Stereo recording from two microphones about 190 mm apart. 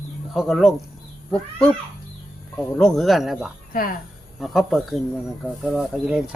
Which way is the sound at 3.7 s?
50° left (ahead or behind).